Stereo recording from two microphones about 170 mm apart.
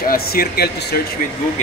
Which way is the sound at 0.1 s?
65° left (ahead or behind).